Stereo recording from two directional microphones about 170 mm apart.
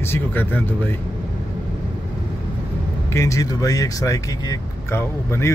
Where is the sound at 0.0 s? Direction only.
10° left (ahead or behind).